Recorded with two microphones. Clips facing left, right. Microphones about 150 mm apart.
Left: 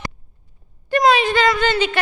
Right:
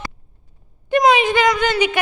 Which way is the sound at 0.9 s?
20° right (ahead or behind).